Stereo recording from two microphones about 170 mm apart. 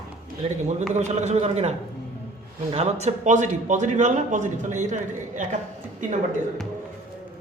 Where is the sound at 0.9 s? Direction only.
40° right (ahead or behind).